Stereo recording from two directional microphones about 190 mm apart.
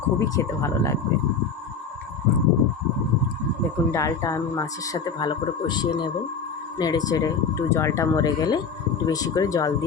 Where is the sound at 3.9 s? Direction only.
15° left (ahead or behind).